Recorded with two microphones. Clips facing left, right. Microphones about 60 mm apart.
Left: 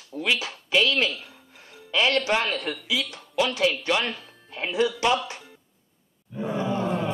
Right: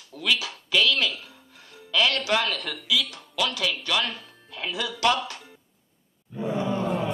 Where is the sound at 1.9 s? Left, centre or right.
Left.